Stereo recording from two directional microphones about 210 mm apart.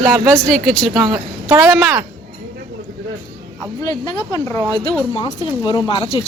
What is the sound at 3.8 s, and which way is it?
Speech, 20° left (ahead or behind).